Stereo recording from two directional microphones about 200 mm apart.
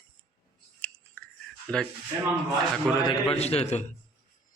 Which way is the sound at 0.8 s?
5° left (ahead or behind).